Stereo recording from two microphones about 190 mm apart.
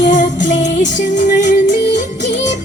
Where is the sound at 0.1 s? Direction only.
40° left (ahead or behind).